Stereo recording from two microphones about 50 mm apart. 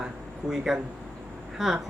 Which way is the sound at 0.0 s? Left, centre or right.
Centre.